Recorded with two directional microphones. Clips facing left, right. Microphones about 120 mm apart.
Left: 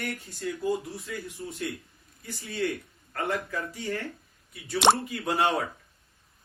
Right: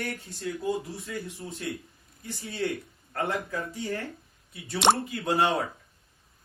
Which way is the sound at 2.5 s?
25° right (ahead or behind).